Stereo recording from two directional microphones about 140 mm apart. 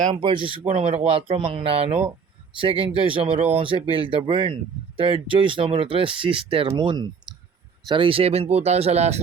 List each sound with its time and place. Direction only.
0.1 s speech: 40° right (ahead or behind)